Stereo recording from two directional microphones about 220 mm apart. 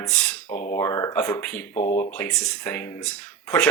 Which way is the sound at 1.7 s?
30° left (ahead or behind).